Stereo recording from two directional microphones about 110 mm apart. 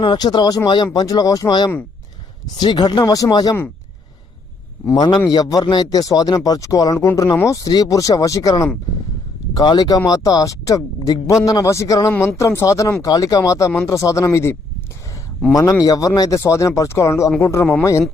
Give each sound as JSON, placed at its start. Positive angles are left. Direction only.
{"t": 0.0, "sound": "speech", "side_deg": 45}
{"t": 4.9, "sound": "a man's voice", "side_deg": 40}
{"t": 15.8, "sound": "speech", "side_deg": 35}